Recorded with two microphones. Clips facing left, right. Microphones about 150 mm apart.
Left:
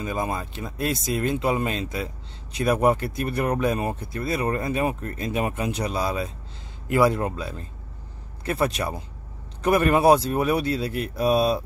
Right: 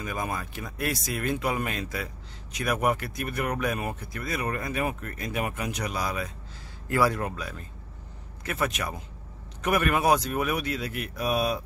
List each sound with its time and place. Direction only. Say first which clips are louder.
0.0 s speech: left 4 dB; 25° left (ahead or behind)